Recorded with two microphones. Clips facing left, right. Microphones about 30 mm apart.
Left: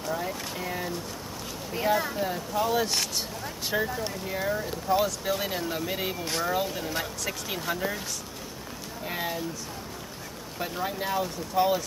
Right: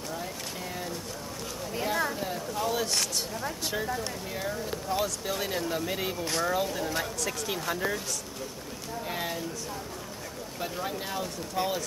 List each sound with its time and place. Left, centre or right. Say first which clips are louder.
0.1 s speech: left 7 dB; centre
9.0 s speech: left 2 dB; centre
10.6 s speech: left 3 dB; centre